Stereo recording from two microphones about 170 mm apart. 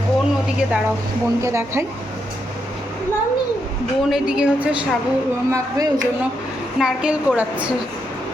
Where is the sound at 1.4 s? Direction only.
15° right (ahead or behind).